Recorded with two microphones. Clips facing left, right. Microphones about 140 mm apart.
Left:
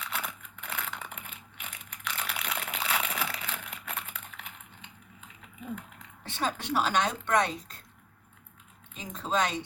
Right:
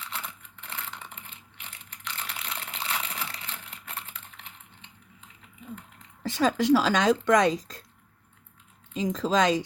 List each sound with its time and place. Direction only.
0.0 s a sound: 55° left (ahead or behind)
6.2 s speech: 90° right
8.9 s speech: 90° right